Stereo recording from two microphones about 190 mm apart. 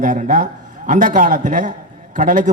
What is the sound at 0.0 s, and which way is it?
A man's voice, 40° right (ahead or behind).